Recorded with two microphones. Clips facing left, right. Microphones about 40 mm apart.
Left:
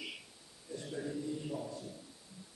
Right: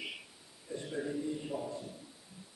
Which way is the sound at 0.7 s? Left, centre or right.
Centre.